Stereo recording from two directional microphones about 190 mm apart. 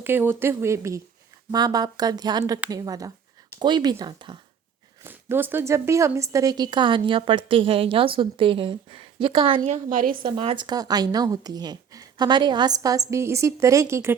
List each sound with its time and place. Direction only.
0.0 s speech: 10° right (ahead or behind)
5.0 s speech: 10° right (ahead or behind)
9.6 s a woman's voice: 40° right (ahead or behind)
10.2 s speech: 25° right (ahead or behind)